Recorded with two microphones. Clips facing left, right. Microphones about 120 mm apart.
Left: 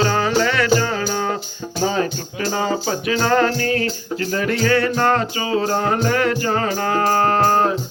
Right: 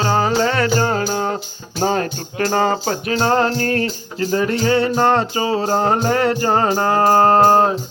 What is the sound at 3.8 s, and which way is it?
Music, 30° right (ahead or behind).